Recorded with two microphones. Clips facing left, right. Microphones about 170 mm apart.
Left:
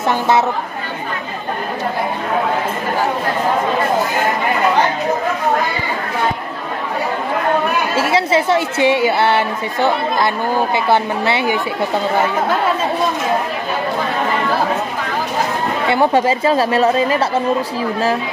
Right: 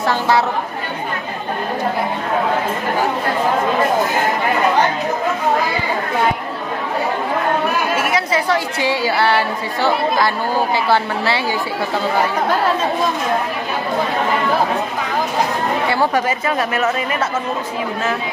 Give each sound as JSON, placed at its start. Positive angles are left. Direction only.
{"t": 7.9, "sound": "speech", "side_deg": 30}
{"t": 15.9, "sound": "speech", "side_deg": 25}